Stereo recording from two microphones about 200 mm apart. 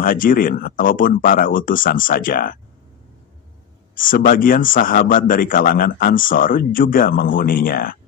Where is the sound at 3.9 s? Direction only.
45° left (ahead or behind).